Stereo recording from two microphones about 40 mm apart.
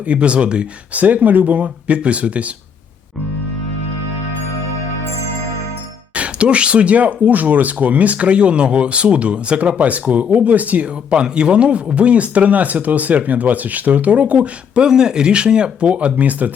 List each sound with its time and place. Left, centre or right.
0.0 s speech: right
0.9 s speech: right
6.1 s speech: right
11.1 s speech: right
14.8 s speech: centre; by 16.5 s right